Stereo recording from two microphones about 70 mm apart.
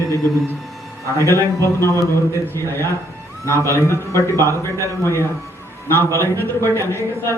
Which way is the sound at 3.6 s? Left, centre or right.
Left.